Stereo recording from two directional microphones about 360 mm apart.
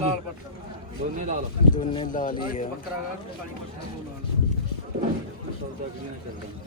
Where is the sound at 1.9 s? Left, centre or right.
Centre.